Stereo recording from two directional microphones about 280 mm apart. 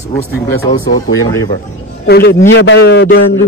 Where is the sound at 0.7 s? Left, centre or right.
Left.